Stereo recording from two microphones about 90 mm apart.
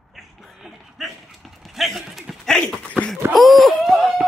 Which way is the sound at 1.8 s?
Centre (ahead or behind).